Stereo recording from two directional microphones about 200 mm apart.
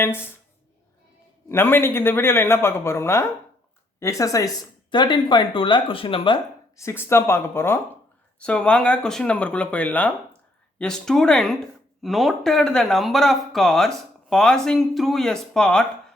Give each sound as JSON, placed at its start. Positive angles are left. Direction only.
{"t": 0.0, "sound": "a woman's voice", "side_deg": 10}
{"t": 1.5, "sound": "a woman's voice", "side_deg": 10}